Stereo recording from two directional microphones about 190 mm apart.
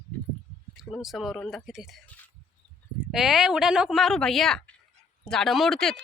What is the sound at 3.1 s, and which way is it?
Speech, centre (ahead or behind).